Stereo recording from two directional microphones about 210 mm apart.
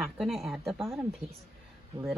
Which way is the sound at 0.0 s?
Centre (ahead or behind).